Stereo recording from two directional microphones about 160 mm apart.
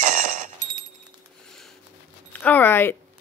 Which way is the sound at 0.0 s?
50° right (ahead or behind).